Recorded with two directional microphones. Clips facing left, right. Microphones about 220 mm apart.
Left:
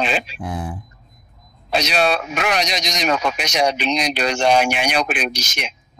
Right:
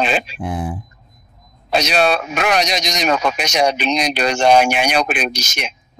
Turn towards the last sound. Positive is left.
turn(degrees=-45)  # may be behind; listen again after turning